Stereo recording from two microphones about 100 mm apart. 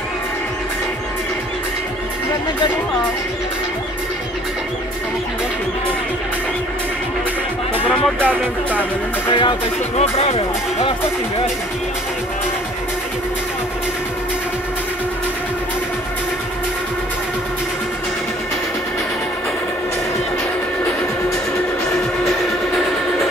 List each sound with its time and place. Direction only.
7.8 s speech: 15° left (ahead or behind)
9.3 s music: 60° left (ahead or behind); by 10.9 s 90° left